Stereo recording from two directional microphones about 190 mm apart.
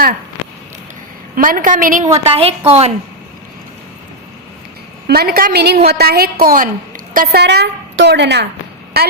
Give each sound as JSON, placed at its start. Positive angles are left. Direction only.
{"t": 1.4, "sound": "a woman's voice", "side_deg": -45}
{"t": 2.1, "sound": "a woman's voice", "side_deg": -30}
{"t": 5.0, "sound": "a woman's voice", "side_deg": -55}